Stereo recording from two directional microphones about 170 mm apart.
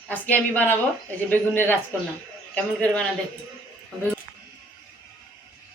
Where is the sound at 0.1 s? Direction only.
10° left (ahead or behind).